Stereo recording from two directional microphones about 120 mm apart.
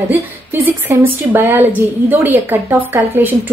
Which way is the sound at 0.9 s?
15° right (ahead or behind).